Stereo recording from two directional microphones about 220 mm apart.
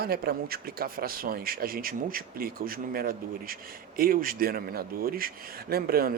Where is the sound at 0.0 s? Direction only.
45° right (ahead or behind).